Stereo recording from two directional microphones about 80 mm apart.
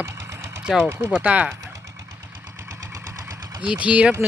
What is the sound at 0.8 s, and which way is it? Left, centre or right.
Speech, right.